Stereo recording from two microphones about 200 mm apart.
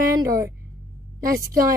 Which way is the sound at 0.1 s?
15° right (ahead or behind).